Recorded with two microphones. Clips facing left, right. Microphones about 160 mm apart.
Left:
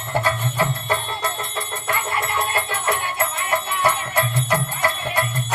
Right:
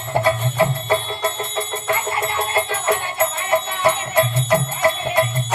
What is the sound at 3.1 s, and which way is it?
Music, 25° right (ahead or behind).